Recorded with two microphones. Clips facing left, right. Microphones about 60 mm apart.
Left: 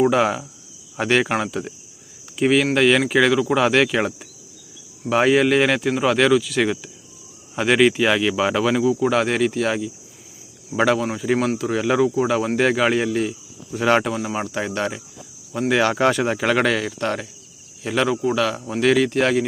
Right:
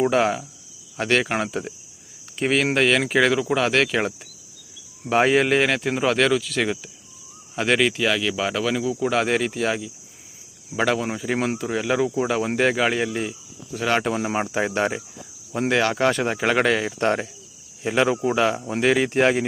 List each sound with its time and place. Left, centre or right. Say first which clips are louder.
0.0 s speech: left 2 dB; centre
14.2 s speech: right 1 dB; right
14.4 s speech: right 2 dB; centre
15.7 s speech: left 3 dB; centre
17.0 s speech: right 3 dB; right
17.8 s speech: even; centre